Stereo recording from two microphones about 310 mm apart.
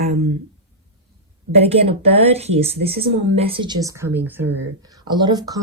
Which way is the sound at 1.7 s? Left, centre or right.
Centre.